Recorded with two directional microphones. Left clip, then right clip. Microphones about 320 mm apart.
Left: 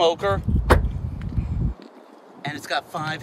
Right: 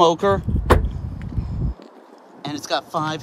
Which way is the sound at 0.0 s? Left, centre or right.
Centre.